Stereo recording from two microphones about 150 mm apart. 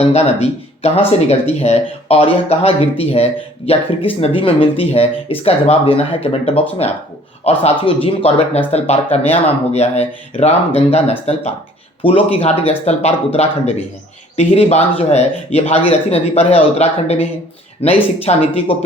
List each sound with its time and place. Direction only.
0.0 s speech: 45° left (ahead or behind)